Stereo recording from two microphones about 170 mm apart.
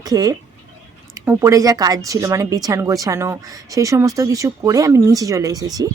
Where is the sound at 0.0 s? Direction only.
20° right (ahead or behind).